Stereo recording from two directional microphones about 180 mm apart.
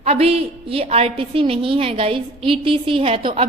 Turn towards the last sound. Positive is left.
turn(degrees=-30)  # may be behind; listen again after turning